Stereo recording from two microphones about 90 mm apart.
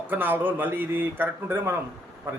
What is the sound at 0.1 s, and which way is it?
A man's voice, 20° right (ahead or behind).